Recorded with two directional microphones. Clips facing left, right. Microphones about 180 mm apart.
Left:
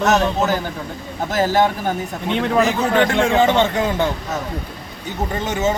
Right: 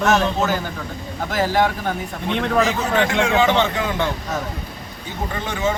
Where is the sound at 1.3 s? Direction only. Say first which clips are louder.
Left 2 dB; 45° left (ahead or behind).